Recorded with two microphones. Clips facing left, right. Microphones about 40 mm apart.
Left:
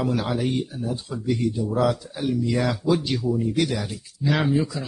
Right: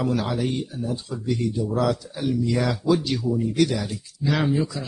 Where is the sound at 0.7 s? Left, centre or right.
Centre.